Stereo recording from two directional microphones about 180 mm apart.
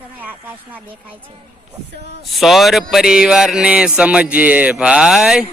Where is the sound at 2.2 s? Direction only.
Centre (ahead or behind).